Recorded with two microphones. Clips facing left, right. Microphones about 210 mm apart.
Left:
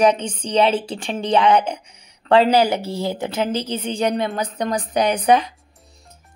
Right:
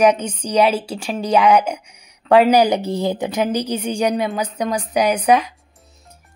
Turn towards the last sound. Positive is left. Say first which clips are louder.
# right 1 dB
turn(degrees=-5)  # may be behind; listen again after turning